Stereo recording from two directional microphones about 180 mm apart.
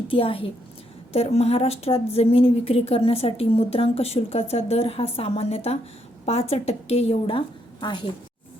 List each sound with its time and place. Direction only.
0.1 s a woman's voice: 30° left (ahead or behind)